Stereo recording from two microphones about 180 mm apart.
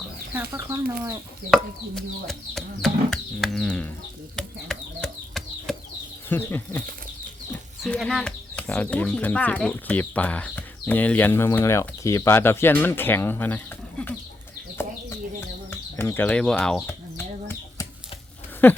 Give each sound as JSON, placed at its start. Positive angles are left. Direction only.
{"t": 0.5, "sound": "speech", "side_deg": -15}
{"t": 1.5, "sound": "speech", "side_deg": 0}
{"t": 4.4, "sound": "a sound", "side_deg": 5}
{"t": 6.2, "sound": "speech", "side_deg": 10}
{"t": 7.9, "sound": "speech", "side_deg": 5}
{"t": 14.8, "sound": "bird", "side_deg": 15}
{"t": 17.2, "sound": "a sound", "side_deg": 15}
{"t": 18.6, "sound": "speech", "side_deg": 10}